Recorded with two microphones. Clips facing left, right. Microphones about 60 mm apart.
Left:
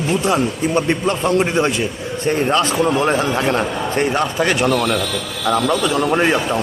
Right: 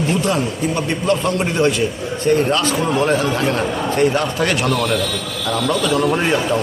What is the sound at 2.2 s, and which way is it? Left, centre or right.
Speech, left.